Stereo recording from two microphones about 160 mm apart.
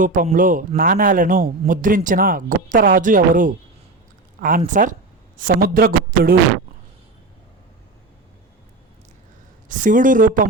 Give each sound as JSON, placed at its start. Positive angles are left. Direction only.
{"t": 0.0, "sound": "speech", "side_deg": -55}
{"t": 9.6, "sound": "speech", "side_deg": -55}